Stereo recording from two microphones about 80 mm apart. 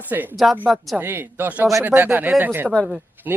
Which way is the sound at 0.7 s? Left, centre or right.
Centre.